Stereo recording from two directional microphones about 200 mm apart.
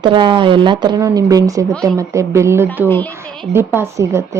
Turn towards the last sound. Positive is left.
turn(degrees=-15)  # may be behind; listen again after turning